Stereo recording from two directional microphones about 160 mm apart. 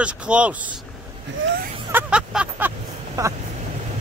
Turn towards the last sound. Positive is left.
turn(degrees=-20)  # may be behind; listen again after turning